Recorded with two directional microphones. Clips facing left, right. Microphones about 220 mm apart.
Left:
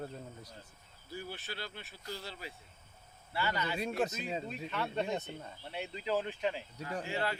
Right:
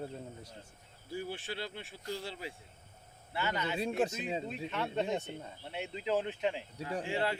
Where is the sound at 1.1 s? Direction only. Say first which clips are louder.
Right 4 dB; 30° right (ahead or behind).